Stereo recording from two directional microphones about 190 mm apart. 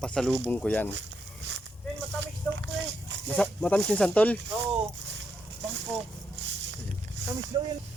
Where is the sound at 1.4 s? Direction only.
65° right (ahead or behind).